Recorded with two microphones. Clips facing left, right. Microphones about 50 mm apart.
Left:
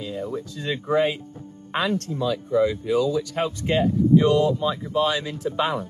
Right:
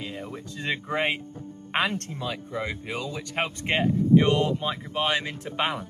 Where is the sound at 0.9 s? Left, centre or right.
Right.